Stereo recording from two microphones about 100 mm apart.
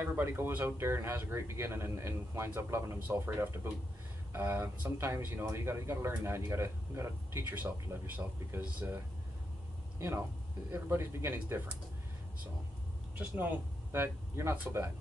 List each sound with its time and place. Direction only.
0.0 s speech: 20° right (ahead or behind)
13.9 s speech: 25° right (ahead or behind)